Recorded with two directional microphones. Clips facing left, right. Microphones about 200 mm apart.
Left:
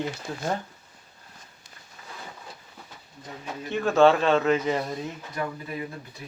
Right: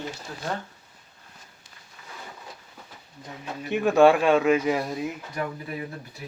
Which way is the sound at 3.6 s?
15° right (ahead or behind).